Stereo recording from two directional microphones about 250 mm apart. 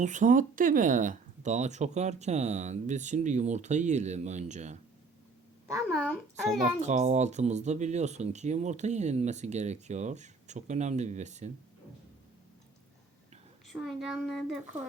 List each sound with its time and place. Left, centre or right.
0.0 s speech: right
5.9 s a child's voice: centre
6.8 s speech: right
13.8 s a child's voice: centre